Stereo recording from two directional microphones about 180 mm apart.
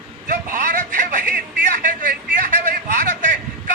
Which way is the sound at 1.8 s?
50° right (ahead or behind).